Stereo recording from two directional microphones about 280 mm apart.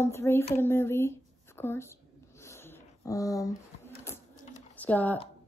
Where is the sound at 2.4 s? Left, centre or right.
Centre.